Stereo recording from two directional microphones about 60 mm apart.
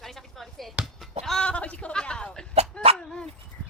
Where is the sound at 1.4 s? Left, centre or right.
Left.